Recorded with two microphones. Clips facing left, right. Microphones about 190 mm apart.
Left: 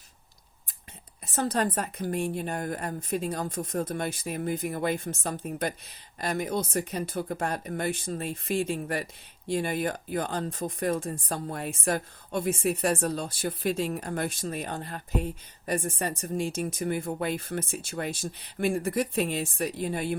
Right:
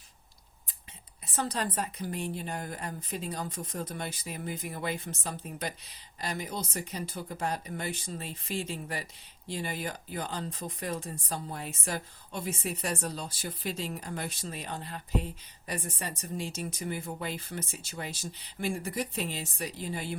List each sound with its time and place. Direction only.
1.2 s speech: 45° left (ahead or behind)